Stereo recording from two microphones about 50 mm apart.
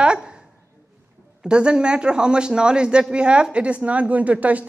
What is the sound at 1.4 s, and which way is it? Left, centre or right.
A woman's voice, centre.